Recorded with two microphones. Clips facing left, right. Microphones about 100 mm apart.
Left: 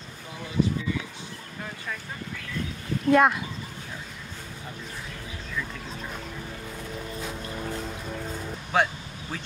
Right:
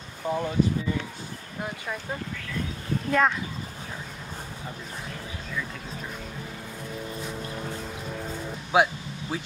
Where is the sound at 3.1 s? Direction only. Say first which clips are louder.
Left 4 dB; 10° left (ahead or behind).